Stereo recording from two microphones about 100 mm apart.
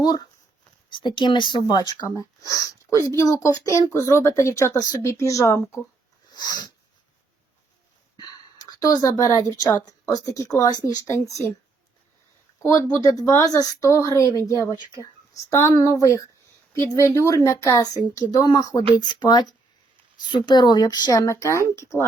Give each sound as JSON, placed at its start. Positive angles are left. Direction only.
{"t": 0.0, "sound": "speech", "side_deg": 40}
{"t": 0.9, "sound": "speech", "side_deg": 50}
{"t": 6.3, "sound": "speech", "side_deg": 45}
{"t": 8.1, "sound": "a sound", "side_deg": 45}
{"t": 9.6, "sound": "speech", "side_deg": 30}
{"t": 12.6, "sound": "speech", "side_deg": 30}
{"t": 14.8, "sound": "speech", "side_deg": 50}
{"t": 15.4, "sound": "speech", "side_deg": 30}